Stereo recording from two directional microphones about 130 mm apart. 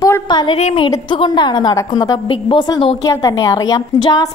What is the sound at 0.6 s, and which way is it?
Speech, 55° left (ahead or behind).